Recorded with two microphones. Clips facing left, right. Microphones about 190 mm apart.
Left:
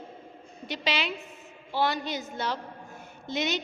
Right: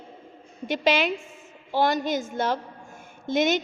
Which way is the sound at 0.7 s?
50° right (ahead or behind).